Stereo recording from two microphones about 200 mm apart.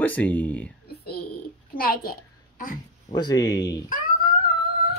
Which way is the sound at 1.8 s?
45° left (ahead or behind).